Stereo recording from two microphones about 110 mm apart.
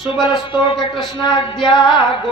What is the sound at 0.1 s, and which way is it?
Speech, 45° left (ahead or behind).